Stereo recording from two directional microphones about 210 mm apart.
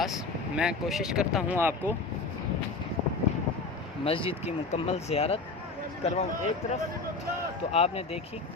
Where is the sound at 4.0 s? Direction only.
25° left (ahead or behind).